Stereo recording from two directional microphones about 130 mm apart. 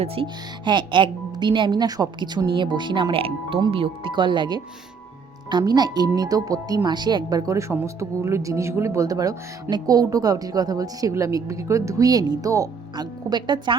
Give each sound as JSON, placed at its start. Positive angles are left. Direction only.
{"t": 0.0, "sound": "speech", "side_deg": -45}